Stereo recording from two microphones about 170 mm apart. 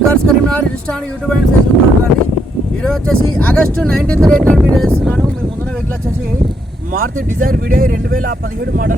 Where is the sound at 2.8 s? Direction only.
5° left (ahead or behind).